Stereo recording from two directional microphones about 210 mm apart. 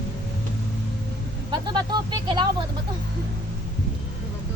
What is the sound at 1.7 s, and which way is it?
Speech, 20° right (ahead or behind).